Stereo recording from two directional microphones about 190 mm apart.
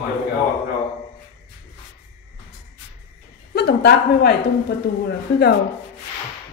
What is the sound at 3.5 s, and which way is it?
A woman's voice, 55° left (ahead or behind).